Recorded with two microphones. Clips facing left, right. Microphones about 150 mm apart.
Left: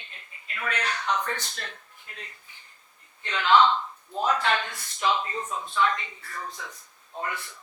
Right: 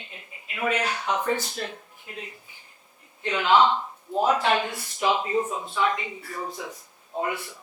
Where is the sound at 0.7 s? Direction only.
25° right (ahead or behind).